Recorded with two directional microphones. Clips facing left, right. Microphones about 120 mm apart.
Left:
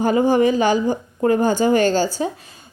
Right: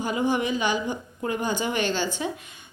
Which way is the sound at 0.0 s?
45° left (ahead or behind).